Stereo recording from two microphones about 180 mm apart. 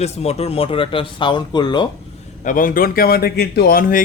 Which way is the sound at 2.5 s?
50° left (ahead or behind).